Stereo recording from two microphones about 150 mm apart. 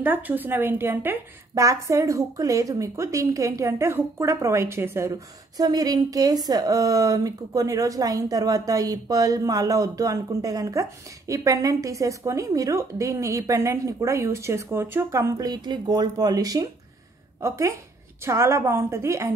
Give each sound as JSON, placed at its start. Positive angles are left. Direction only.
{"t": 0.0, "sound": "a woman's voice", "side_deg": -10}